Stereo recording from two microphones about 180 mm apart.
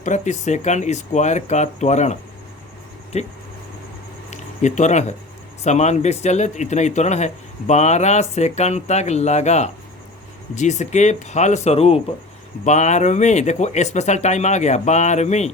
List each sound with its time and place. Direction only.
0.0 s speech: 40° left (ahead or behind)
3.1 s speech: 35° left (ahead or behind)